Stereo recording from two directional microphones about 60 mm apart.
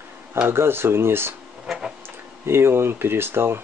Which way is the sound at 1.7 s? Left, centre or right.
Centre.